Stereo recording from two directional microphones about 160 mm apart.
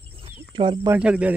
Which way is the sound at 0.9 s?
5° right (ahead or behind).